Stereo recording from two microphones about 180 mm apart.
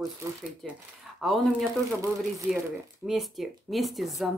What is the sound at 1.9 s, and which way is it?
Speech, 15° right (ahead or behind).